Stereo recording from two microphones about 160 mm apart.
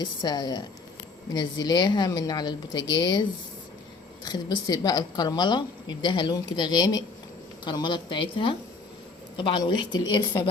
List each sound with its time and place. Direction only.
0.0 s a woman's voice: 25° left (ahead or behind)